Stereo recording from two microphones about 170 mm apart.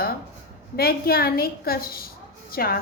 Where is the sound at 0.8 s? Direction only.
65° left (ahead or behind).